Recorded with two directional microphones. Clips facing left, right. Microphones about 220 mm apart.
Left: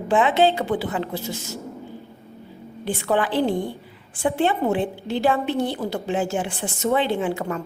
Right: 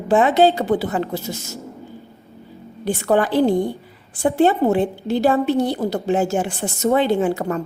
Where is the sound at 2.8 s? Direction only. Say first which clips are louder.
Right 4 dB; 45° right (ahead or behind).